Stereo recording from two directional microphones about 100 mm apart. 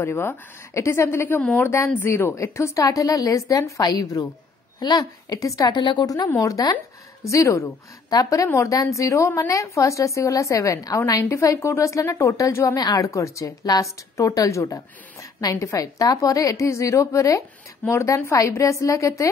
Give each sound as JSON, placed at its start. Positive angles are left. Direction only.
{"t": 0.0, "sound": "a woman's voice", "side_deg": 20}
{"t": 5.7, "sound": "a woman's voice", "side_deg": 50}